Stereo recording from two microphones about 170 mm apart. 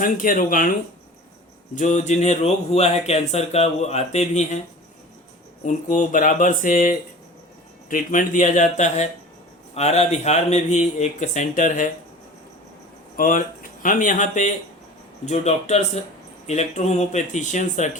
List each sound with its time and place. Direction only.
0.0 s speech: 55° left (ahead or behind)
1.7 s speech: 45° left (ahead or behind)
5.6 s speech: 45° left (ahead or behind)
13.1 s speech: 55° left (ahead or behind)